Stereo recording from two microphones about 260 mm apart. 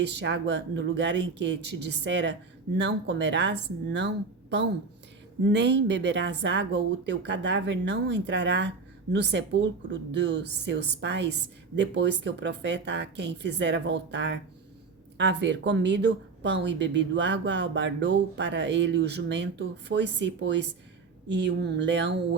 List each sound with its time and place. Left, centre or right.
0.0 s speech: right